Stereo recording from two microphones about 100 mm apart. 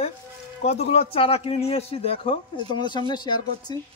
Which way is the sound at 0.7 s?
90° left.